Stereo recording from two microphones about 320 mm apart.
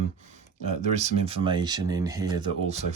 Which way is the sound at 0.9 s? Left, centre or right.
Centre.